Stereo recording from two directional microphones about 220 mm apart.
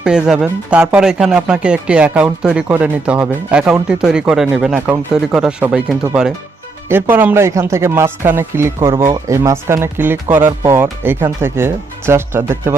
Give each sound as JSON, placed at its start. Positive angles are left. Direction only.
{"t": 0.0, "sound": "speech", "side_deg": -5}